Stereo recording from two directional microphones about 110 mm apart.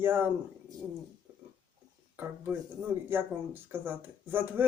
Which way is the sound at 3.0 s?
20° right (ahead or behind).